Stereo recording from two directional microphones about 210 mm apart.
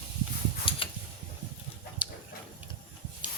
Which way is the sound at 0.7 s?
25° left (ahead or behind).